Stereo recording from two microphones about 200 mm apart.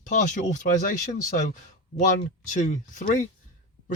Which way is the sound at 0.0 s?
40° left (ahead or behind).